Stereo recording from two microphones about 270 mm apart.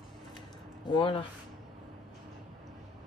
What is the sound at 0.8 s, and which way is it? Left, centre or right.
Speech, centre.